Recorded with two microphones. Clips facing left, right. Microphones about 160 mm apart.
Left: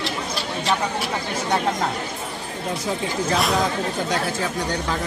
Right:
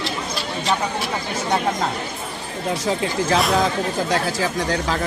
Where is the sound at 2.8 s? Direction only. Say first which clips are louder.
Right 3 dB; 75° right (ahead or behind).